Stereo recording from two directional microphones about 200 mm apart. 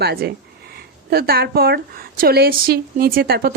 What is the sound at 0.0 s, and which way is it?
A woman's voice, 55° right (ahead or behind).